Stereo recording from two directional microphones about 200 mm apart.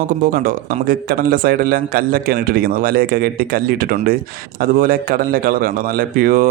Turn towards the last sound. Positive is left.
turn(degrees=-45)  # may be behind; listen again after turning